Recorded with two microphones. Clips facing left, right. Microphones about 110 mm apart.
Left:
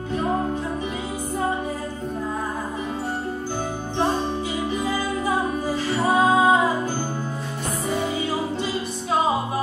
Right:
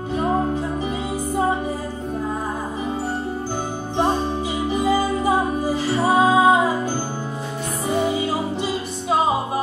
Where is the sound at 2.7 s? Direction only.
15° right (ahead or behind).